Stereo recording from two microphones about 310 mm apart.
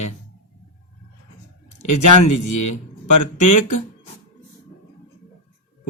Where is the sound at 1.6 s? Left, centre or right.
Left.